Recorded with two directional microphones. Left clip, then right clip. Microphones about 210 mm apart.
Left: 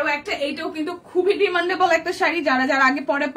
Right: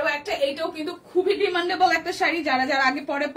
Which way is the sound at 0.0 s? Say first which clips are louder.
Left 1 dB; 15° left (ahead or behind).